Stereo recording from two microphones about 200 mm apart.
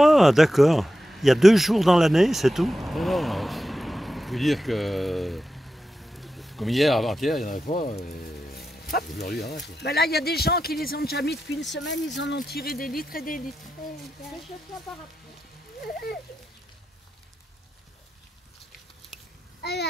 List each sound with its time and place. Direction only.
0.0 s a sound: centre (ahead or behind)
7.7 s speech: 40° left (ahead or behind); by 12.0 s 65° left (ahead or behind)
12.4 s speech: 50° left (ahead or behind)
19.6 s a child's voice: 55° left (ahead or behind)